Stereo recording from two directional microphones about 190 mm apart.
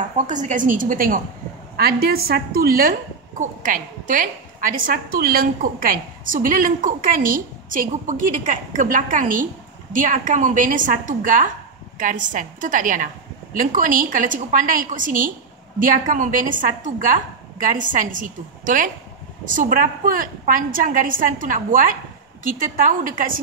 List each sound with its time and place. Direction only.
0.3 s a woman's voice: 40° right (ahead or behind)